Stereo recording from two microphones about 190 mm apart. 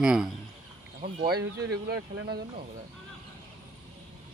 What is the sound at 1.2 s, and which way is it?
Speech, 55° right (ahead or behind).